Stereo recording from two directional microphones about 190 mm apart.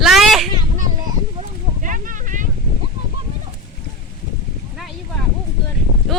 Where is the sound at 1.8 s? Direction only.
45° right (ahead or behind).